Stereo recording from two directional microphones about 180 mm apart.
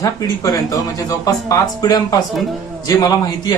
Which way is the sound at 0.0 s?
20° left (ahead or behind).